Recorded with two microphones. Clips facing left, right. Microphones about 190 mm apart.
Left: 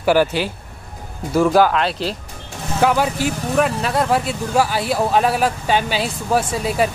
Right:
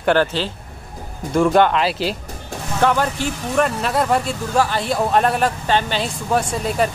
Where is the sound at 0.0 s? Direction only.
10° left (ahead or behind).